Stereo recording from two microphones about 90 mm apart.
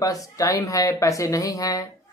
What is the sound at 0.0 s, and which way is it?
Speech, 40° left (ahead or behind).